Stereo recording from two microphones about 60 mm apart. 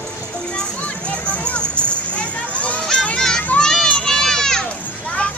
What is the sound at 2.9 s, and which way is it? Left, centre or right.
Children playing, centre.